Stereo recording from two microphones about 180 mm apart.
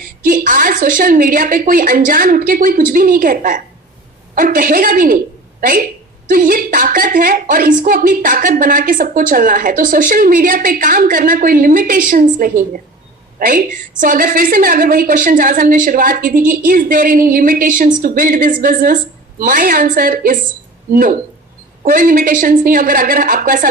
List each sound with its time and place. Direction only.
0.2 s a woman's voice: 50° right (ahead or behind)
14.0 s a woman's voice: 50° right (ahead or behind)